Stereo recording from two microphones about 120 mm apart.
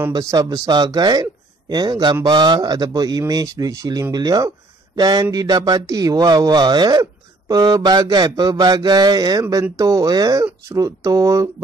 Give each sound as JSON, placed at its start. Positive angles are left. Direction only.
{"t": 0.1, "sound": "speech", "side_deg": -30}